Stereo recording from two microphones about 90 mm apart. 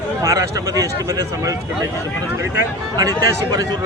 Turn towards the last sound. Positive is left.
turn(degrees=-45)  # may be behind; listen again after turning